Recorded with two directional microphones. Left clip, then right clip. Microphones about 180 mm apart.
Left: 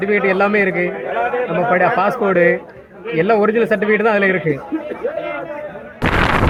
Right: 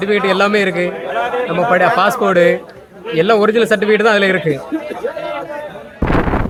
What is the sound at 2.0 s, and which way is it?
A man's voice, 15° right (ahead or behind).